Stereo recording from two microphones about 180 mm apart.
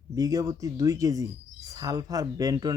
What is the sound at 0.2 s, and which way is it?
Speech, 20° right (ahead or behind).